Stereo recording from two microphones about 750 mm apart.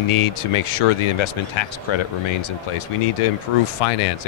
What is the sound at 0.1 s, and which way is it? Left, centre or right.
Speech, left.